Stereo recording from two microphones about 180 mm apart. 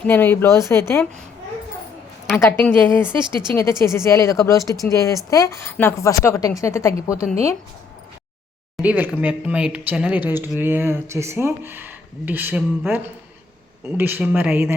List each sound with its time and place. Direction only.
0.0 s speech: 10° left (ahead or behind)
2.4 s speech: 10° left (ahead or behind)
8.7 s speech: 10° right (ahead or behind)